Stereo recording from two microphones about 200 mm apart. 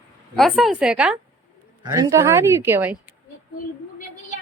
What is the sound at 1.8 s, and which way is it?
A woman's voice, 20° right (ahead or behind).